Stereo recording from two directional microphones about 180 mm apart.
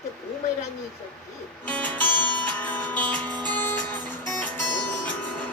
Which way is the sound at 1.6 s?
10° left (ahead or behind).